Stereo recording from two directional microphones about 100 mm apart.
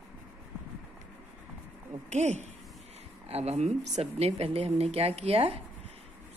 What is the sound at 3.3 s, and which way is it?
Speech, 90° right.